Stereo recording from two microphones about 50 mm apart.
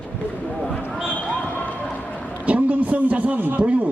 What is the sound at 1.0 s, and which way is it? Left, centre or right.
Basketball bounce, left.